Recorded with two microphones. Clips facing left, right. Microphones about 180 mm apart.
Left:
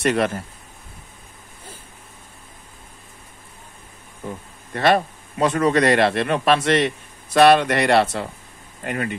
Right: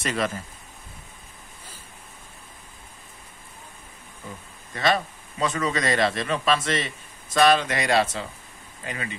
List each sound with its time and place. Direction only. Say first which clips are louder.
0.0 s speech: left 7 dB; 60° left (ahead or behind)
4.7 s speech: left 6 dB; 60° left (ahead or behind)